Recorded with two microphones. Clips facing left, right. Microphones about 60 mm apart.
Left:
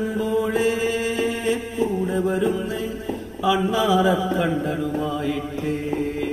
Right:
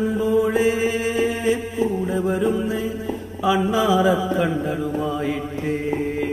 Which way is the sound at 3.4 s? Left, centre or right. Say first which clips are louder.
Right 1 dB; centre.